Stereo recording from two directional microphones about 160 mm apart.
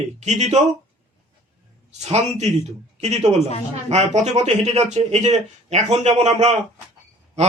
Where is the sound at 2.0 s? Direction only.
45° right (ahead or behind).